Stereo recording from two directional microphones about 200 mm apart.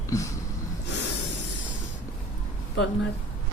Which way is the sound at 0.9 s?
60° left (ahead or behind).